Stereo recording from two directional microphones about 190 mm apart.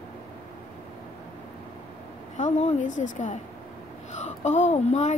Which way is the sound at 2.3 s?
35° left (ahead or behind).